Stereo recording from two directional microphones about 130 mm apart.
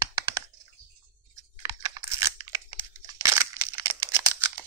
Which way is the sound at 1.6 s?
30° right (ahead or behind).